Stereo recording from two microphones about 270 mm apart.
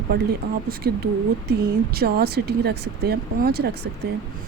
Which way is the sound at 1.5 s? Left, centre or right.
Right.